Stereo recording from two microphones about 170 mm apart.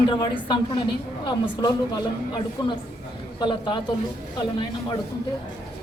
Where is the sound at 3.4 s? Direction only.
25° left (ahead or behind).